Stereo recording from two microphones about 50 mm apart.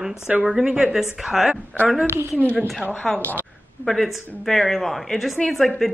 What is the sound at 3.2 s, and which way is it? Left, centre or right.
Speech, left.